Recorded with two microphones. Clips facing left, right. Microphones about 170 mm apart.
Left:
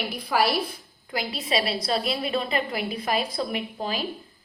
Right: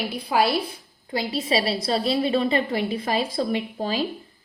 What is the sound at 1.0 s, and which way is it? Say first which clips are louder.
A woman's voice: right 5 dB; 30° right (ahead or behind).